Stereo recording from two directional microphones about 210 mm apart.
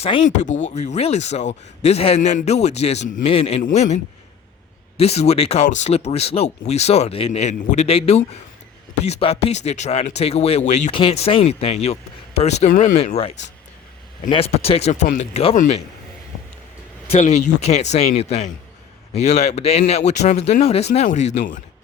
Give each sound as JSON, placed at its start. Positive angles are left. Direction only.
{"t": 0.0, "sound": "a man's voice", "side_deg": 35}
{"t": 17.1, "sound": "a man's voice", "side_deg": 30}